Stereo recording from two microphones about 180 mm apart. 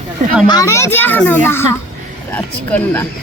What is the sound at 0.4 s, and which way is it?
A child's voice, 20° left (ahead or behind).